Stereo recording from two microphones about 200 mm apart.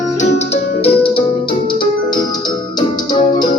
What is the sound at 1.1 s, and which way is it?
Music, 25° left (ahead or behind).